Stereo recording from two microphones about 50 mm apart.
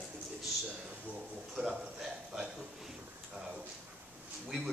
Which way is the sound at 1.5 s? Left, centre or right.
Centre.